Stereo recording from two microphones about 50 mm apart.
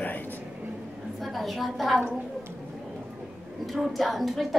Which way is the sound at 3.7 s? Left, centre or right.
Centre.